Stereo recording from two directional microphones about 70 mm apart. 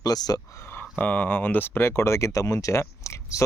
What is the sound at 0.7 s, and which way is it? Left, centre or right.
Speech, left.